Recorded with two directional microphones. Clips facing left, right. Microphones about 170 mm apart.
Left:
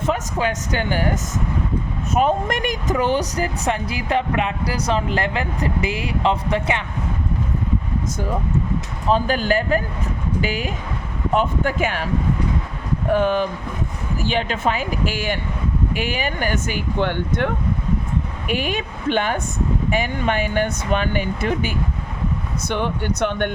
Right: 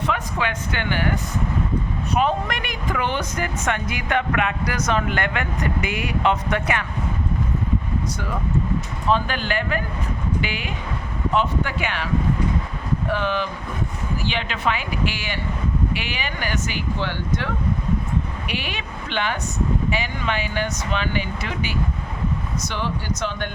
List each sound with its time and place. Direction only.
0.0 s speech: 40° left (ahead or behind)
9.0 s speech: 40° left (ahead or behind)
13.1 s speech: 45° left (ahead or behind)